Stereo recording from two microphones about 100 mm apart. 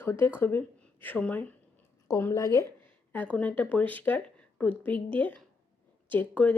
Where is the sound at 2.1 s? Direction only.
30° left (ahead or behind).